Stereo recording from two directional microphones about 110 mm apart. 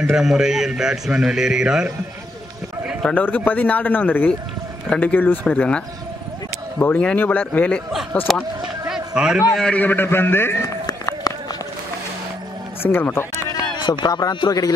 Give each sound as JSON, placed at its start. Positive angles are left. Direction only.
{"t": 0.1, "sound": "a man's voice", "side_deg": -5}
{"t": 3.0, "sound": "speech", "side_deg": 10}
{"t": 8.3, "sound": "a man's voice", "side_deg": 0}
{"t": 8.8, "sound": "run", "side_deg": -5}
{"t": 9.6, "sound": "a man's voice", "side_deg": 10}
{"t": 10.9, "sound": "run", "side_deg": 35}
{"t": 12.9, "sound": "a man's voice", "side_deg": 20}
{"t": 13.7, "sound": "a sound", "side_deg": 45}
{"t": 14.0, "sound": "a man's voice", "side_deg": 35}